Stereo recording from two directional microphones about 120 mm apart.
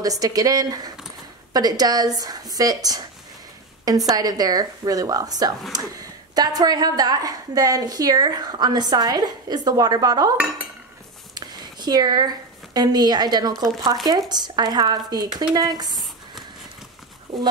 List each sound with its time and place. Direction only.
0.0 s a woman's voice: 30° right (ahead or behind)
4.1 s a woman's voice: 30° right (ahead or behind)
11.3 s a woman's voice: 35° right (ahead or behind)